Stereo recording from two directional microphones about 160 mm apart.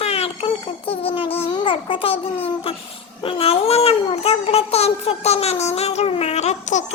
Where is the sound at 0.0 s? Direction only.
40° left (ahead or behind).